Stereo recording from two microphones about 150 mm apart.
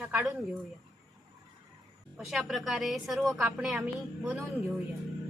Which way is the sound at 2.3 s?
Centre (ahead or behind).